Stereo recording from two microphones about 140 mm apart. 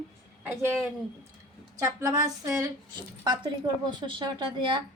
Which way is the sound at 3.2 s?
35° right (ahead or behind).